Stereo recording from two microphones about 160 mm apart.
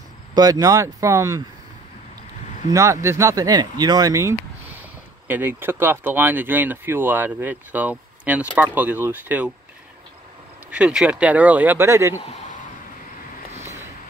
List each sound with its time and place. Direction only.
0.3 s speech: 25° right (ahead or behind)
2.7 s speech: 20° right (ahead or behind)
10.7 s speech: 5° right (ahead or behind)